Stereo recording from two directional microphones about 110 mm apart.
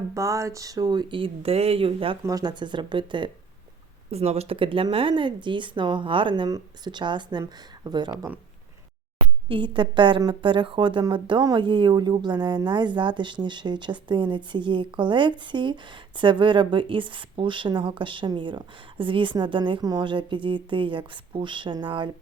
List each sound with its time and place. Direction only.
0.1 s speech: 30° right (ahead or behind); by 2.1 s 55° right (ahead or behind)
2.2 s speech: 35° right (ahead or behind)
4.1 s speech: 70° right (ahead or behind); by 8.2 s 40° right (ahead or behind)
9.5 s speech: 50° right (ahead or behind)